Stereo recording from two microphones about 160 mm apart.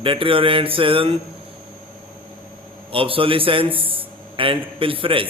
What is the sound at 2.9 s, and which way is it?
A man's voice, 35° right (ahead or behind).